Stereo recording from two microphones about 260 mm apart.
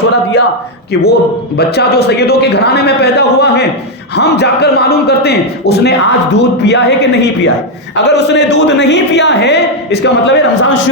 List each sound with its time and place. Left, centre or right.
1.5 s a man's voice: left